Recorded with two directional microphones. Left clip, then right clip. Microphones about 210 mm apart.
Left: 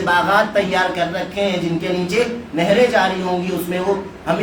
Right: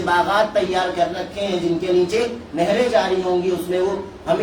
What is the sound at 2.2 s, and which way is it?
Speech, 20° left (ahead or behind).